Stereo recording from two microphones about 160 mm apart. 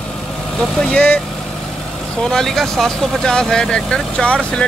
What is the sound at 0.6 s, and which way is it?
Speech, 5° left (ahead or behind).